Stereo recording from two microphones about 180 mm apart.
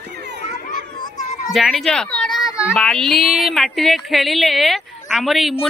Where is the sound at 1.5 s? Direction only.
Centre (ahead or behind).